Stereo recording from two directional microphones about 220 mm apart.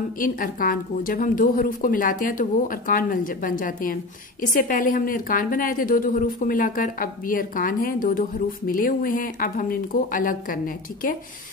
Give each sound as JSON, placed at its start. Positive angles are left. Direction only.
{"t": 0.2, "sound": "a woman's voice", "side_deg": 40}